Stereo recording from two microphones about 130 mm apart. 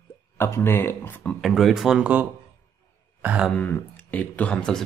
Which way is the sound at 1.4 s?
Centre (ahead or behind).